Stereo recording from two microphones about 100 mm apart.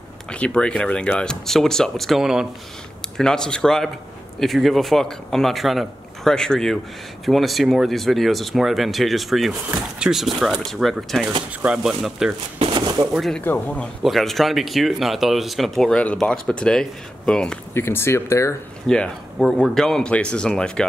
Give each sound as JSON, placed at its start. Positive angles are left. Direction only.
{"t": 0.3, "sound": "speech", "side_deg": 10}
{"t": 3.2, "sound": "speech", "side_deg": 5}
{"t": 12.5, "sound": "a sound", "side_deg": -55}
{"t": 13.1, "sound": "speech", "side_deg": 0}
{"t": 13.4, "sound": "speech", "side_deg": 20}
{"t": 14.0, "sound": "speech", "side_deg": 0}
{"t": 17.7, "sound": "speech", "side_deg": 25}
{"t": 18.9, "sound": "speech", "side_deg": 5}